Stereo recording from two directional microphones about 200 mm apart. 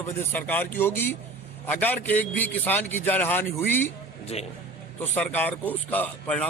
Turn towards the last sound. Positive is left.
turn(degrees=5)  # may be behind; listen again after turning